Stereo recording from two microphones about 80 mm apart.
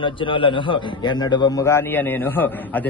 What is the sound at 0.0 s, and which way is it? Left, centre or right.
A man's voice, left.